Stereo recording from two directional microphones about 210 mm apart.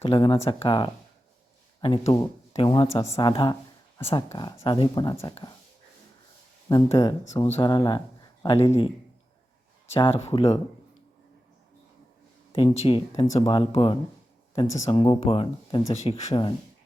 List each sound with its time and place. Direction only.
0.0 s speech: 25° left (ahead or behind)
6.7 s speech: 15° left (ahead or behind)
9.9 s speech: 30° left (ahead or behind)
12.5 s speech: 25° left (ahead or behind)